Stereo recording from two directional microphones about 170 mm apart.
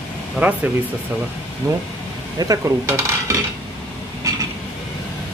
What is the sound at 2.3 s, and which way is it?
Dishes, 20° right (ahead or behind).